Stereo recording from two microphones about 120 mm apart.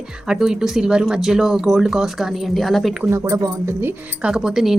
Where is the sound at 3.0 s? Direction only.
25° right (ahead or behind).